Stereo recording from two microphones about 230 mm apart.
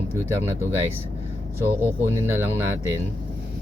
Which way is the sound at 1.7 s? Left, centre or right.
Centre.